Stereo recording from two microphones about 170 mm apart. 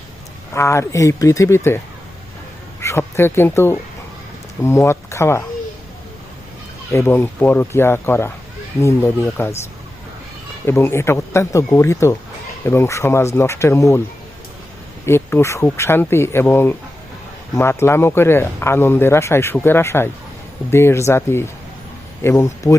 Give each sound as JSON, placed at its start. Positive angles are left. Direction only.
{"t": 0.5, "sound": "speech", "side_deg": 15}
{"t": 2.8, "sound": "speech", "side_deg": 15}
{"t": 6.9, "sound": "speech", "side_deg": 15}
{"t": 10.7, "sound": "speech", "side_deg": 15}
{"t": 15.0, "sound": "speech", "side_deg": 15}